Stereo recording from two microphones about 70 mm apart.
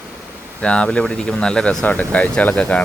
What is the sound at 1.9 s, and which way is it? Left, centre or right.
Speech, left.